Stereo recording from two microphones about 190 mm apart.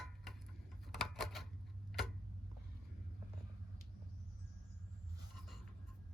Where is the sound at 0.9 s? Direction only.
Centre (ahead or behind).